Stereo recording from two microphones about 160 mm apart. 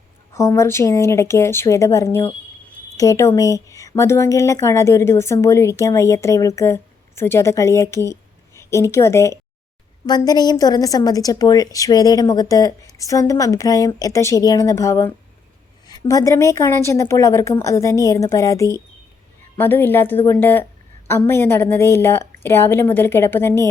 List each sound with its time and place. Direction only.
0.3 s a woman's voice: 20° left (ahead or behind)